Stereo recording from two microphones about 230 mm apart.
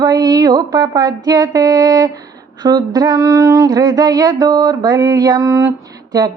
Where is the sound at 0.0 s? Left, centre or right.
Centre.